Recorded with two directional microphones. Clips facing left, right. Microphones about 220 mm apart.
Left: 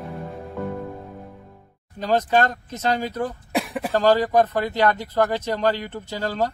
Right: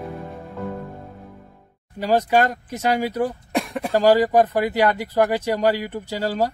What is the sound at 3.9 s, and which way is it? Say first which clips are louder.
Speech: right 2 dB; 10° right (ahead or behind).